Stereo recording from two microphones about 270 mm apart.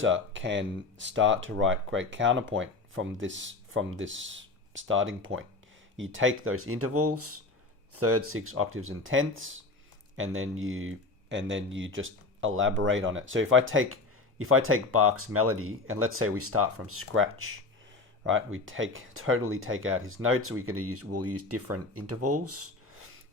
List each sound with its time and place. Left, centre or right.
0.0 s speech: right